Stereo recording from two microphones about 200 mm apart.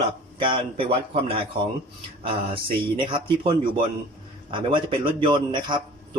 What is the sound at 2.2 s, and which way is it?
A man's voice, 25° right (ahead or behind).